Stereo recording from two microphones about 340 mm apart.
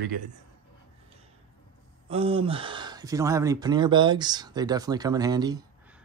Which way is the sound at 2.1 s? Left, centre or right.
Centre.